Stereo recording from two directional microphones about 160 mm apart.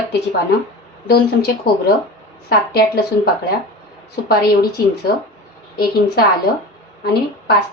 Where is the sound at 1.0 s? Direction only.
75° left (ahead or behind).